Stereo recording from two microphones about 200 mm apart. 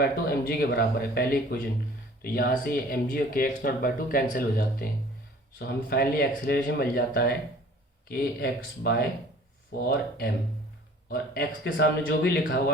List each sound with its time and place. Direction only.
0.0 s speech: 50° left (ahead or behind)